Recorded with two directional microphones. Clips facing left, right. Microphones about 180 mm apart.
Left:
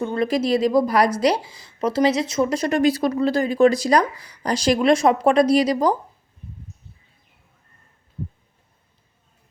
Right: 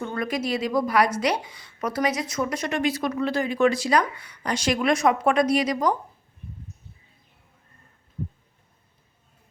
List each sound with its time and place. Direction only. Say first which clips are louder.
0.0 s a woman's voice: left 6 dB; 25° left (ahead or behind)